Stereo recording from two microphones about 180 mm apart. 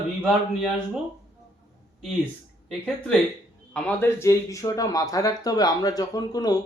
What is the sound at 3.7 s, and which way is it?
Speech, 5° left (ahead or behind).